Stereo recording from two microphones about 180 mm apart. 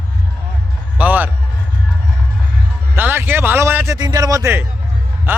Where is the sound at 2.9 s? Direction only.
10° right (ahead or behind).